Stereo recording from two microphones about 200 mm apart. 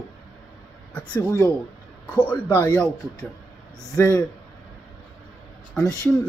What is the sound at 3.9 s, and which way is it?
Speech, 15° left (ahead or behind).